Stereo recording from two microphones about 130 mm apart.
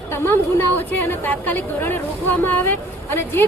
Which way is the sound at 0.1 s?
15° left (ahead or behind).